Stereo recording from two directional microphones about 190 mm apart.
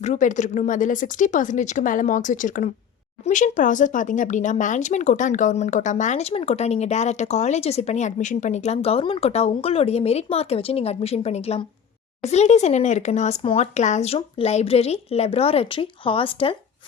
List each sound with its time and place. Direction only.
0.0 s speech: 40° left (ahead or behind)